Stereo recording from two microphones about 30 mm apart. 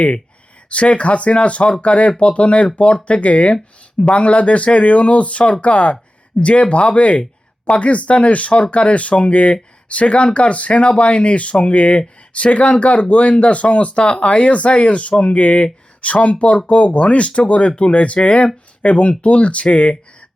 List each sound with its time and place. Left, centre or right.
0.7 s speech: left